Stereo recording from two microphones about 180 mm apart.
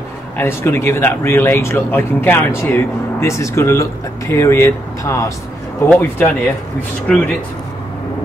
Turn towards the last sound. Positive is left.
turn(degrees=5)  # may be behind; listen again after turning